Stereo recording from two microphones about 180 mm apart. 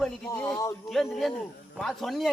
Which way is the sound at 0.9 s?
Centre (ahead or behind).